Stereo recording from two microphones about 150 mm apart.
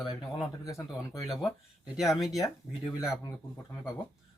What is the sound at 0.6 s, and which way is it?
Speech, 20° left (ahead or behind).